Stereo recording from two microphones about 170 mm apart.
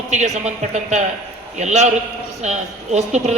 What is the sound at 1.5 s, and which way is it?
A man's voice, 45° right (ahead or behind).